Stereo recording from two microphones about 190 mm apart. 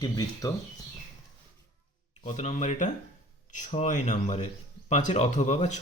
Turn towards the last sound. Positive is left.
turn(degrees=35)  # may be behind; listen again after turning